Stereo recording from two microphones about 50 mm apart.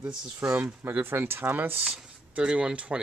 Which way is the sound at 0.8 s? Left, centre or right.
Right.